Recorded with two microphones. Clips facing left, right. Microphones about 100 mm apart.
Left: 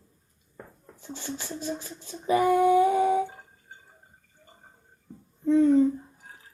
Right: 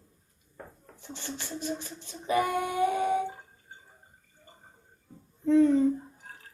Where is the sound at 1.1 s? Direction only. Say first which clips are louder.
Left 3 dB; 15° left (ahead or behind).